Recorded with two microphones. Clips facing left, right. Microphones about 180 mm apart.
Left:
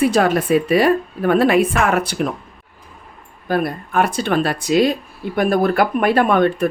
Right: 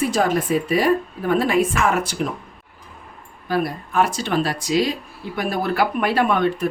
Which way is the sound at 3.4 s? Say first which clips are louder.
Left 3 dB; 55° left (ahead or behind).